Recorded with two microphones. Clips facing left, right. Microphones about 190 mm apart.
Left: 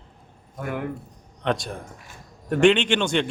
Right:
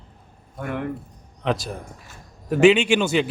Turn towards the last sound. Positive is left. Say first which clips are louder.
# right 3 dB
turn(degrees=-5)  # may be behind; listen again after turning